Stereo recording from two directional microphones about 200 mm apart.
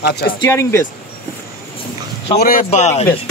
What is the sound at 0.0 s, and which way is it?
Speech, 55° left (ahead or behind).